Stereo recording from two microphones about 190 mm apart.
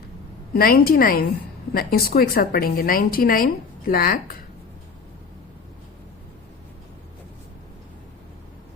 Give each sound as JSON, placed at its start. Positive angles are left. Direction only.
{"t": 0.5, "sound": "a woman's voice", "side_deg": 50}